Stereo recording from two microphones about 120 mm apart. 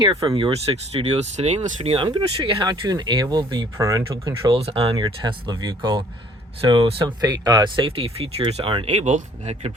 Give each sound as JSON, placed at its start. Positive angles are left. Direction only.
{"t": 0.3, "sound": "speech", "side_deg": -45}
{"t": 2.0, "sound": "speech", "side_deg": -40}
{"t": 4.5, "sound": "speech", "side_deg": -50}
{"t": 5.0, "sound": "speech", "side_deg": -35}